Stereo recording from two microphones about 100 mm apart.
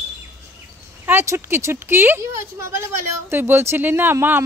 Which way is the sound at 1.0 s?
25° right (ahead or behind).